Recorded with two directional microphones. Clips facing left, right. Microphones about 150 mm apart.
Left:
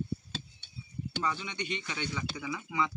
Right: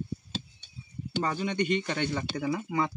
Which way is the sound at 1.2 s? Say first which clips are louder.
Right 8 dB; 50° right (ahead or behind).